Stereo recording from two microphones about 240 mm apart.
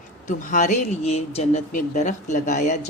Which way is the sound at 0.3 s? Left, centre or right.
Left.